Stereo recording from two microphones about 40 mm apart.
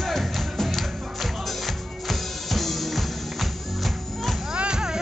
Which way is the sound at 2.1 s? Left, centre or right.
Centre.